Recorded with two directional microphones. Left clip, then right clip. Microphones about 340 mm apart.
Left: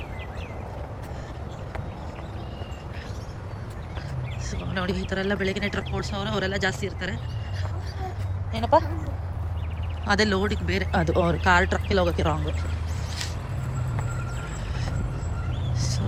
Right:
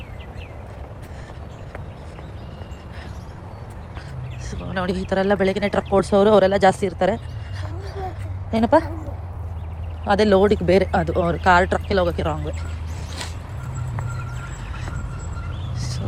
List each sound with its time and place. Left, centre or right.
4.7 s speech: centre
8.5 s a woman's voice: right
10.1 s speech: centre
15.8 s a sound: centre